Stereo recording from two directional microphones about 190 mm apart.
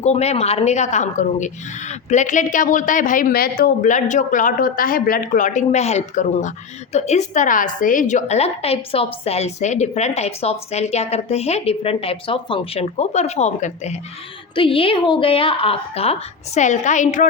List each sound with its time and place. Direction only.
0.0 s a woman's voice: 35° left (ahead or behind)
14.5 s a woman's voice: 25° left (ahead or behind)